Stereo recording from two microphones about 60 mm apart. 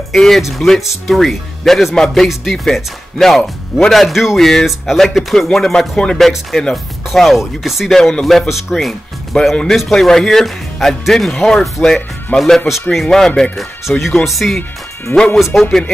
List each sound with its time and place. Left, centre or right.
0.1 s speech: centre
7.9 s speech: centre
12.4 s speech: centre
15.1 s speech: left
15.5 s speech: centre